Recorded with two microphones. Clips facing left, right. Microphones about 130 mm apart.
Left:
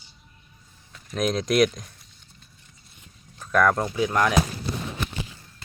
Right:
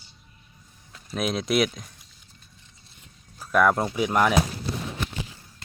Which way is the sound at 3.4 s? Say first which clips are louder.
Even; 10° right (ahead or behind).